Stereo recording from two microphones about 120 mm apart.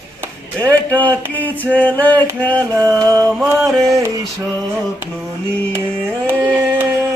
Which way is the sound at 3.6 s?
Centre (ahead or behind).